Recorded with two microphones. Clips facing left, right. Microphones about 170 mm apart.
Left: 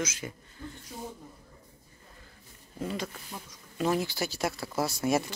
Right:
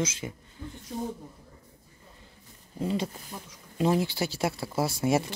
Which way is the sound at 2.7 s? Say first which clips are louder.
Right 5 dB; 30° right (ahead or behind).